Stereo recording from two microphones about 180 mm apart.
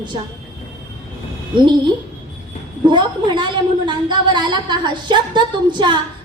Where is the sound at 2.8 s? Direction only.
25° right (ahead or behind).